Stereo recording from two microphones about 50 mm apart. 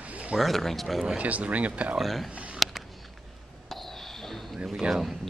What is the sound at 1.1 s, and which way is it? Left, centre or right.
Speech, right.